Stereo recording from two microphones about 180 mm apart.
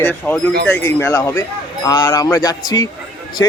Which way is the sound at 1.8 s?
25° left (ahead or behind).